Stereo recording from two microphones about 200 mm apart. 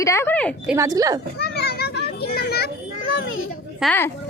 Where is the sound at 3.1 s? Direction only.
75° left (ahead or behind).